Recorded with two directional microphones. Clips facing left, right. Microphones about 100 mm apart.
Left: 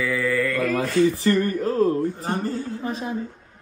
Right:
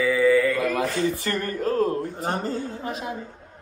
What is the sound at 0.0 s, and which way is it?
Mantra, 5° right (ahead or behind).